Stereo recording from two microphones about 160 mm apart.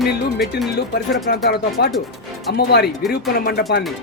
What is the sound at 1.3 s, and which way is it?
Speech, 70° left (ahead or behind).